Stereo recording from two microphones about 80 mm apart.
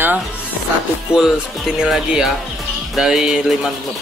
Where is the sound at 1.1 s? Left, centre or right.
Centre.